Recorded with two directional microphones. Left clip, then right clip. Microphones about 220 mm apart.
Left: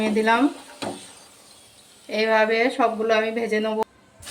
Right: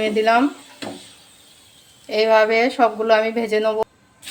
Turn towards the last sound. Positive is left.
turn(degrees=-45)  # may be behind; listen again after turning